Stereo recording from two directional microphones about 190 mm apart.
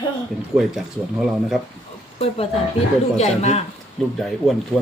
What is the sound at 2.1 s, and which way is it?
Speech, 30° left (ahead or behind).